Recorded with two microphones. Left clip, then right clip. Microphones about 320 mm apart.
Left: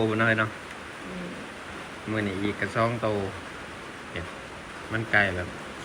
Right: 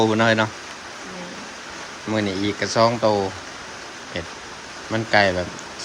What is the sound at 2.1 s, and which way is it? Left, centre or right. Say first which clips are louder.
Speech: right 6 dB; centre.